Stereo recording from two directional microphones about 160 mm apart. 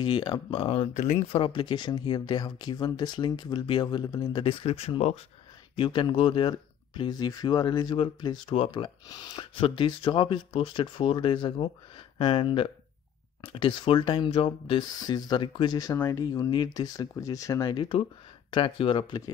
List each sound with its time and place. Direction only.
0.0 s speech: 30° left (ahead or behind)
0.9 s speech: 50° left (ahead or behind)
1.3 s speech: 35° left (ahead or behind)